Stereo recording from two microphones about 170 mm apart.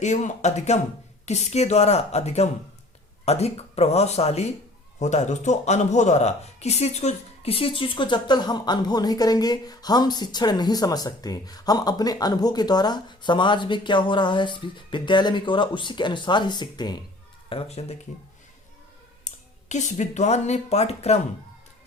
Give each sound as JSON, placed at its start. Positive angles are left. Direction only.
{"t": 0.0, "sound": "a woman's voice", "side_deg": 45}
{"t": 17.5, "sound": "a woman's voice", "side_deg": 35}
{"t": 19.2, "sound": "speech", "side_deg": 45}